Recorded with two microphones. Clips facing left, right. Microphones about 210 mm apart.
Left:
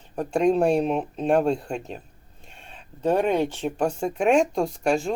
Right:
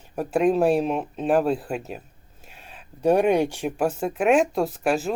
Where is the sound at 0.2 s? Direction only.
5° right (ahead or behind).